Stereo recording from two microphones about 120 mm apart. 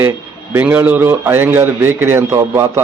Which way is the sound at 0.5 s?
15° right (ahead or behind).